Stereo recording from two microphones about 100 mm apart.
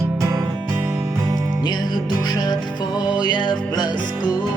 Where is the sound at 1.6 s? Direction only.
45° left (ahead or behind).